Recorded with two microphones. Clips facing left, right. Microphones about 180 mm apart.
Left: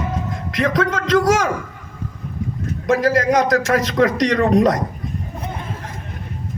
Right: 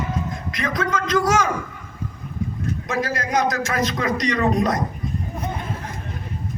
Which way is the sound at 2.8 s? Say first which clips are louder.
Left 11 dB; 90° left.